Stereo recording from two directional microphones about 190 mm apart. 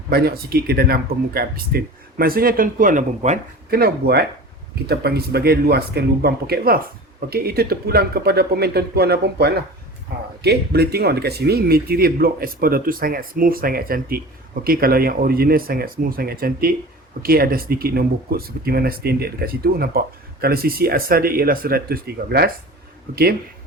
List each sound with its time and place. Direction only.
0.1 s speech: 55° right (ahead or behind)
10.1 s a sound: 50° right (ahead or behind)
10.4 s speech: 55° right (ahead or behind)